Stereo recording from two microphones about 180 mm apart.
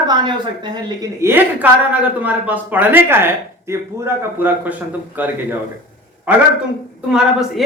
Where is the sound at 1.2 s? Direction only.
10° right (ahead or behind).